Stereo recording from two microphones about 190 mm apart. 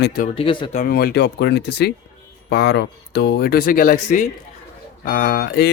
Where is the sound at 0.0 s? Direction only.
55° left (ahead or behind).